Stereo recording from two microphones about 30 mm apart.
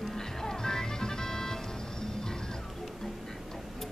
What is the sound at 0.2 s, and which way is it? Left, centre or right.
Music, centre.